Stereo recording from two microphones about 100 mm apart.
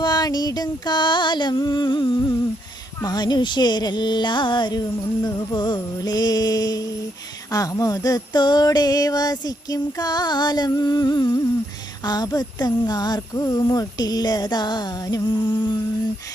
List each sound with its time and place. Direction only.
0.0 s music: 45° left (ahead or behind)
12.0 s speech: 40° left (ahead or behind)